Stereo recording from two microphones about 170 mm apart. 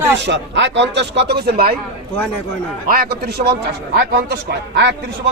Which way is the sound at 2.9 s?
65° right (ahead or behind).